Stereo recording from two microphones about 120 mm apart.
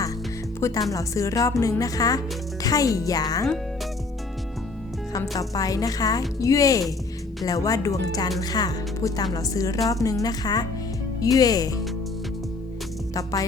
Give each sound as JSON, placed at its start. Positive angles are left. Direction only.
{"t": 0.6, "sound": "a woman's voice", "side_deg": 30}
{"t": 5.1, "sound": "a woman's voice", "side_deg": 30}
{"t": 13.1, "sound": "speech", "side_deg": 30}